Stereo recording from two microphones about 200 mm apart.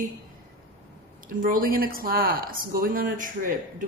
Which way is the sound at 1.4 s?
45° right (ahead or behind).